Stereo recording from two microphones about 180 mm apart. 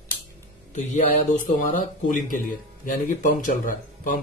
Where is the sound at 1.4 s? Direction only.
45° left (ahead or behind).